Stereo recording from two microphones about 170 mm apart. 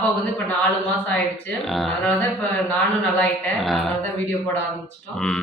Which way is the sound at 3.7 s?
Centre (ahead or behind).